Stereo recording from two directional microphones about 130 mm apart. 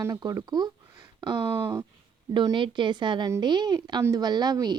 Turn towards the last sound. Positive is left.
turn(degrees=-30)  # may be behind; listen again after turning